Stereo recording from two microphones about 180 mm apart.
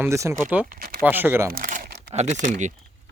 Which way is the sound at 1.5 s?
50° right (ahead or behind).